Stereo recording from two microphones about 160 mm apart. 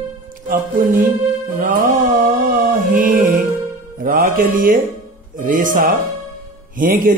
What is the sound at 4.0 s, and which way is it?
Mantra, 60° right (ahead or behind).